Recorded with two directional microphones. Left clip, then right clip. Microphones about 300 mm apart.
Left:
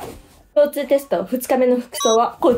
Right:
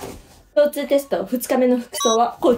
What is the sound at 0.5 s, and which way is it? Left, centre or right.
Speech, centre.